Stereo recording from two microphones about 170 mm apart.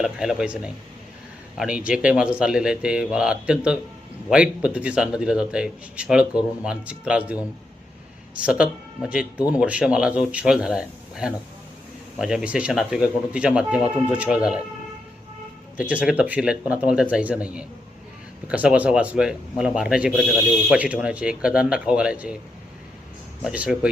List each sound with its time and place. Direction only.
0.0 s speech: centre (ahead or behind)
8.4 s speech: 5° right (ahead or behind)
15.8 s speech: 5° right (ahead or behind)
23.4 s speech: 5° right (ahead or behind)